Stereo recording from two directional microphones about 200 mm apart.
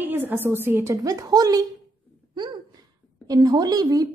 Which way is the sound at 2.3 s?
20° right (ahead or behind).